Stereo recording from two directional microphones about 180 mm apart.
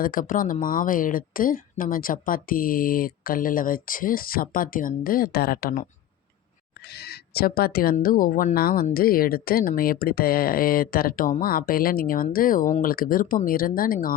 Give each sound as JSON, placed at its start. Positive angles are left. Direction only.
{"t": 0.0, "sound": "speech", "side_deg": 50}
{"t": 6.8, "sound": "speech", "side_deg": 65}